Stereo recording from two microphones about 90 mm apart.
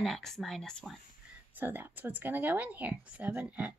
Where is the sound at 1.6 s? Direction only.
20° right (ahead or behind).